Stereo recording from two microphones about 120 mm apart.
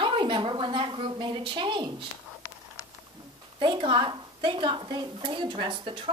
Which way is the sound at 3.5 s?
40° right (ahead or behind).